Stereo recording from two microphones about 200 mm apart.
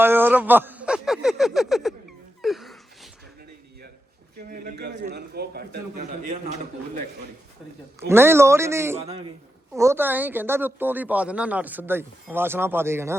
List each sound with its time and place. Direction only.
0.0 s speech: 10° right (ahead or behind)
2.4 s a sound: centre (ahead or behind)
4.5 s a man's voice: 50° right (ahead or behind)
6.0 s a man's voice: 35° right (ahead or behind)
7.9 s speech: 10° right (ahead or behind)